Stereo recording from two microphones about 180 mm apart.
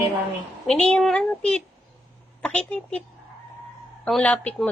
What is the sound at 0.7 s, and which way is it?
A woman's voice, 5° left (ahead or behind).